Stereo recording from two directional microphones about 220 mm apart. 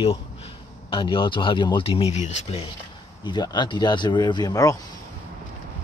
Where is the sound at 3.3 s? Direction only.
20° left (ahead or behind).